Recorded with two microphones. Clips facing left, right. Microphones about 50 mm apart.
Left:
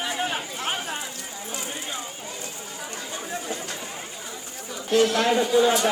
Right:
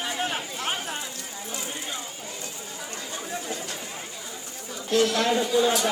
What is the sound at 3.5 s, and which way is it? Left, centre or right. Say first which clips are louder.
Chatter: left 1 dB; left.